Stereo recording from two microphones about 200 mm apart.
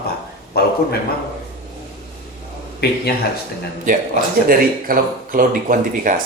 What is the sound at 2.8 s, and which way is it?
Speech, 50° left (ahead or behind).